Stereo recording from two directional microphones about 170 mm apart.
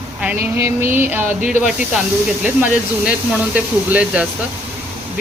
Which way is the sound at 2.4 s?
10° right (ahead or behind).